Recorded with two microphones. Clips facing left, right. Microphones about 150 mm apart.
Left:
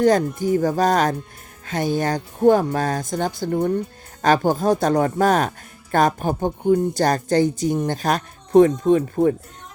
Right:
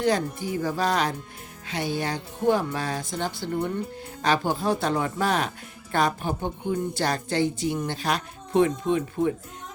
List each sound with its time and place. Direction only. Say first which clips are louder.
0.0 s speech: left 7 dB; 45° left (ahead or behind)